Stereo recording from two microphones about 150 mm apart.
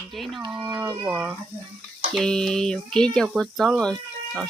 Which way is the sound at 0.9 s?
15° right (ahead or behind).